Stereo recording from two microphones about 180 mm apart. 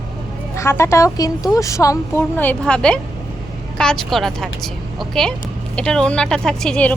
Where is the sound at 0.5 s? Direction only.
15° left (ahead or behind).